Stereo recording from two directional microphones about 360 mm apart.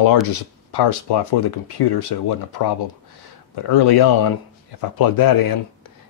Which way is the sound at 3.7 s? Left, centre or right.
Left.